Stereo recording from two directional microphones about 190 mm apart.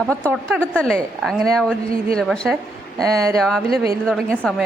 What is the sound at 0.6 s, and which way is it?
Speech, 5° left (ahead or behind).